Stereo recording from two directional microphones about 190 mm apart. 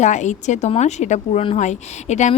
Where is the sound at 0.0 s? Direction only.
40° left (ahead or behind).